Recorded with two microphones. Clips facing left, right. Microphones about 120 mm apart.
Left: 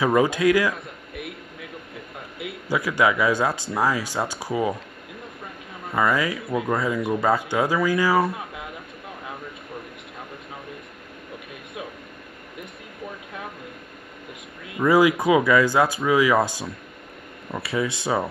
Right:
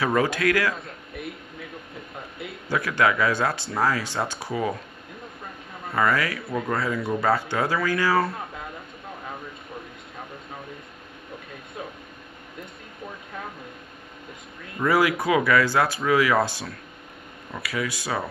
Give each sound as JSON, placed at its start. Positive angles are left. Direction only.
{"t": 0.0, "sound": "a man's voice", "side_deg": 15}
{"t": 2.3, "sound": "speech", "side_deg": 10}
{"t": 5.9, "sound": "speech", "side_deg": 15}
{"t": 14.7, "sound": "speech", "side_deg": 15}
{"t": 17.5, "sound": "speech", "side_deg": 25}